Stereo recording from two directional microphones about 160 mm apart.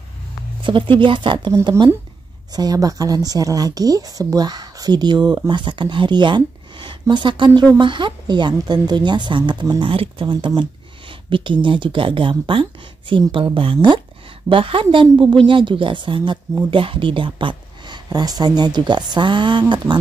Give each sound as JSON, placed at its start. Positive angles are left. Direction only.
{"t": 0.7, "sound": "a woman's voice", "side_deg": -30}